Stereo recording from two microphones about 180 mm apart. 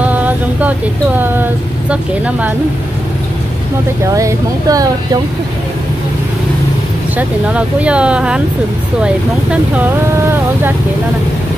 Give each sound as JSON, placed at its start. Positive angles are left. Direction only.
{"t": 0.0, "sound": "speech", "side_deg": -10}
{"t": 4.0, "sound": "speech", "side_deg": -15}
{"t": 7.2, "sound": "speech", "side_deg": -5}